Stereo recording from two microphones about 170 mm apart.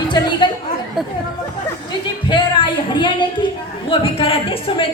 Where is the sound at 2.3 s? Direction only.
30° left (ahead or behind).